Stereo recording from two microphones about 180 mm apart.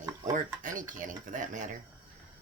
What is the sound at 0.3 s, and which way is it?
Speech, 45° right (ahead or behind).